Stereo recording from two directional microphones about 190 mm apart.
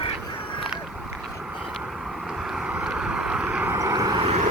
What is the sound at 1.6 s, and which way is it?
Vehicle, centre (ahead or behind).